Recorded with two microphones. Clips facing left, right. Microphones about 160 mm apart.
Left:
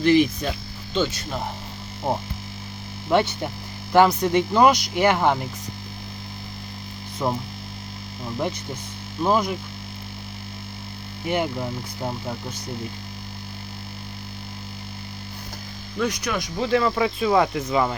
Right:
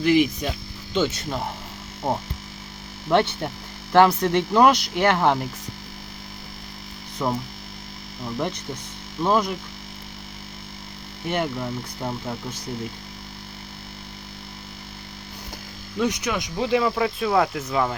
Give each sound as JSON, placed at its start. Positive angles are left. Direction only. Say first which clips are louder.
{"t": 0.0, "sound": "hum", "louder": "left 1 dB", "side_deg": -5}
{"t": 3.1, "sound": "speech", "louder": "even", "side_deg": 5}
{"t": 7.2, "sound": "speech", "louder": "even", "side_deg": 5}
{"t": 9.2, "sound": "speech", "louder": "even", "side_deg": 5}
{"t": 11.3, "sound": "speech", "louder": "left 1 dB", "side_deg": 10}
{"t": 16.0, "sound": "speech", "louder": "right 1 dB", "side_deg": -20}